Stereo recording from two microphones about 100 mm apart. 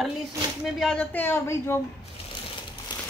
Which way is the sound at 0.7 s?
5° left (ahead or behind).